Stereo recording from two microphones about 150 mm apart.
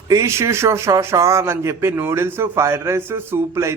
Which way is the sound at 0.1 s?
20° right (ahead or behind).